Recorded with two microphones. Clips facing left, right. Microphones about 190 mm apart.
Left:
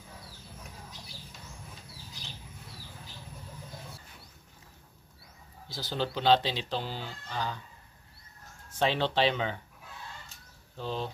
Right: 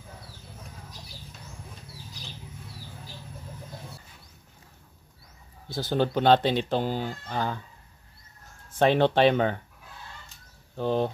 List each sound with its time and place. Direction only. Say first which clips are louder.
5.7 s speech: right 8 dB; 50° right (ahead or behind)
8.7 s speech: right 7 dB; 55° right (ahead or behind)
10.8 s speech: right 9 dB; 55° right (ahead or behind)